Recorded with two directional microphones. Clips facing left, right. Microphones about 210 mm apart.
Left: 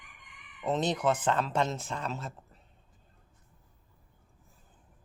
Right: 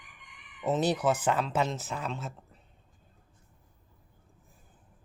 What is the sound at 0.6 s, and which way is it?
Speech, 10° right (ahead or behind).